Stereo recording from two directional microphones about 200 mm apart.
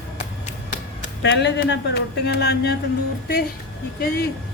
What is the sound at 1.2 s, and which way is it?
Speech, 60° left (ahead or behind).